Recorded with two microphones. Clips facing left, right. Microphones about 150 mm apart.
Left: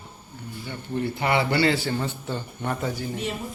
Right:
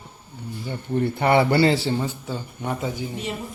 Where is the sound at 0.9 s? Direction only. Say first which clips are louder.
Right 5 dB; 50° right (ahead or behind).